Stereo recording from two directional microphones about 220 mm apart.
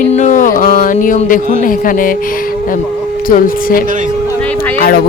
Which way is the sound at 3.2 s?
40° left (ahead or behind).